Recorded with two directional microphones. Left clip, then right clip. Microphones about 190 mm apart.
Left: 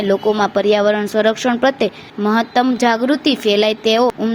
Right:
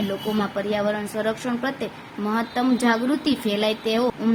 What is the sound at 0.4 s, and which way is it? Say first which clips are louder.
A woman's voice: left 10 dB; 35° left (ahead or behind).